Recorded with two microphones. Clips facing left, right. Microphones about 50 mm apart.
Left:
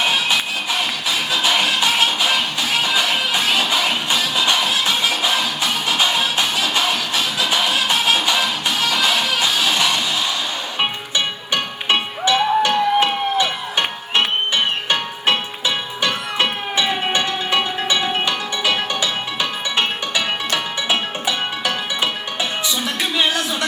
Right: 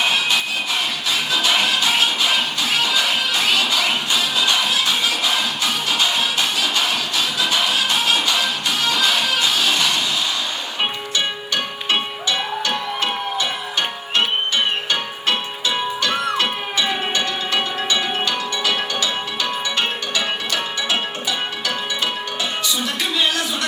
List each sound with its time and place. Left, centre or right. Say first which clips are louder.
1.6 s music: left 1 dB; left
7.5 s music: left 2 dB; centre
11.5 s music: left 3 dB; left
16.4 s music: left 2 dB; centre
21.2 s music: left 2 dB; centre
23.0 s a sound: left 2 dB; left